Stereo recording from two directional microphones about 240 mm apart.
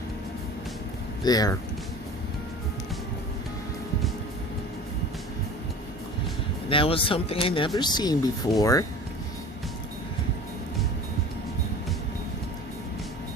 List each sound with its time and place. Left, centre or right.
1.2 s speech: centre
6.7 s speech: left